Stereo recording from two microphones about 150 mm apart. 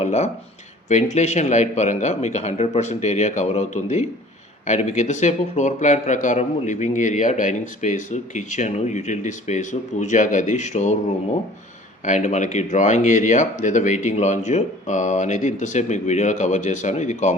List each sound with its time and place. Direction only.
0.0 s speech: 50° left (ahead or behind)
12.0 s speech: 50° left (ahead or behind)